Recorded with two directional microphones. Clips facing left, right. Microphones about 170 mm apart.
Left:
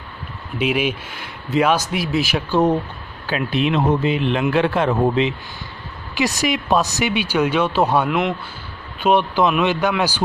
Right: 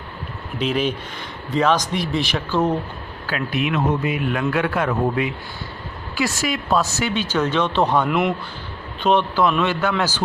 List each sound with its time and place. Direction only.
0.6 s speech: 10° left (ahead or behind)
2.5 s a man's voice: 15° left (ahead or behind); by 8.4 s centre (ahead or behind)
9.0 s speech: 15° left (ahead or behind)